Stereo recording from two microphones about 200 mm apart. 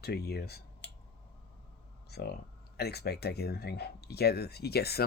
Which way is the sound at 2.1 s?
55° left (ahead or behind).